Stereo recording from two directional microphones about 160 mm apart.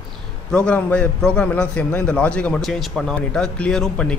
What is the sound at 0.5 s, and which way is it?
A man's voice, 5° left (ahead or behind).